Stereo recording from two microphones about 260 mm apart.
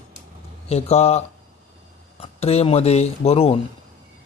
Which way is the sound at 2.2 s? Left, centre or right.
Left.